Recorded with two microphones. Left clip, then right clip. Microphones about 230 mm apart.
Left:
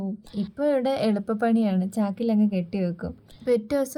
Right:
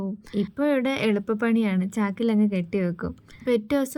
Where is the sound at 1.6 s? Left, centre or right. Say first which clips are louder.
Even; centre.